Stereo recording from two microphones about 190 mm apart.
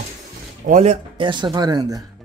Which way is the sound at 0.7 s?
35° right (ahead or behind).